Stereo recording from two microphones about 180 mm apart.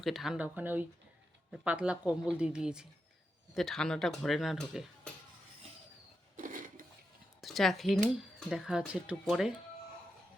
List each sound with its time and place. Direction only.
0.0 s speech: centre (ahead or behind)
6.3 s a sound: 45° right (ahead or behind)
7.4 s speech: centre (ahead or behind)